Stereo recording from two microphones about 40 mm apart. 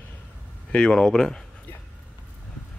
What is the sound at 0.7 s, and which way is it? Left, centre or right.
Speech, centre.